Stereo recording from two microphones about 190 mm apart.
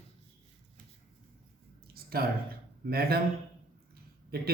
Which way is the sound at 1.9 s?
55° right (ahead or behind).